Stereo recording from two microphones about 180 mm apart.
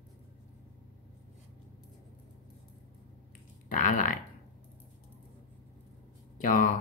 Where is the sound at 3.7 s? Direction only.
45° left (ahead or behind).